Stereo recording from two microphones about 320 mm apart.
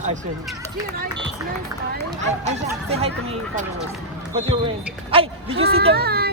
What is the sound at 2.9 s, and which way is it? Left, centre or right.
Speech, centre.